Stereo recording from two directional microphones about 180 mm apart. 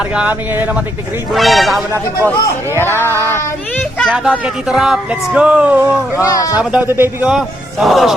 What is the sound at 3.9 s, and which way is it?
A man's voice, centre (ahead or behind).